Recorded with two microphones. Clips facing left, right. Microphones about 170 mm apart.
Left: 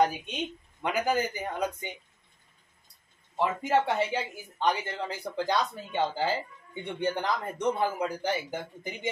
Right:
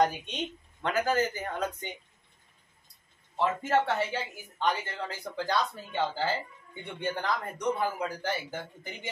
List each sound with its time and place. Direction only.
0.0 s speech: 10° left (ahead or behind)
3.3 s speech: 15° left (ahead or behind)